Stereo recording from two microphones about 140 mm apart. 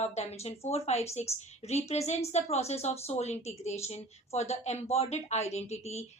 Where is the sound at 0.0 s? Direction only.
55° left (ahead or behind).